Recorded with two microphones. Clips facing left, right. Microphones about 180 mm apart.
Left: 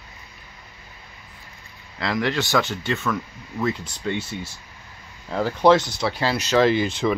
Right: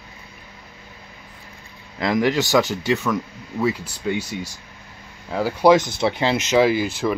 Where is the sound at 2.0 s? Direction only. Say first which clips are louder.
Right 4 dB; 15° right (ahead or behind).